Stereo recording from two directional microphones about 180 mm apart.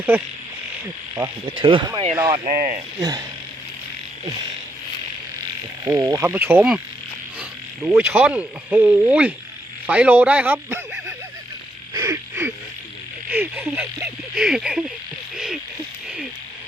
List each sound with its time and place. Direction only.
0.1 s cricket: 10° right (ahead or behind)
1.1 s speech: 25° right (ahead or behind)
2.5 s speech: 45° right (ahead or behind)
3.0 s speech: 20° right (ahead or behind)
5.8 s cricket: 20° right (ahead or behind)
9.8 s speech: 10° right (ahead or behind)
11.9 s a sound: 15° right (ahead or behind)
13.3 s speech: 10° right (ahead or behind)